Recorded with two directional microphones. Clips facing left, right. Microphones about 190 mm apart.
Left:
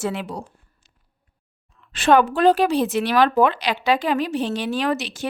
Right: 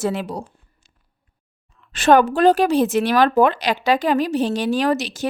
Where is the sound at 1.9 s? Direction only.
45° right (ahead or behind).